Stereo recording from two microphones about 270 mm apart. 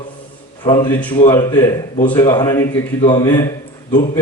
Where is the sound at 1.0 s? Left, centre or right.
Centre.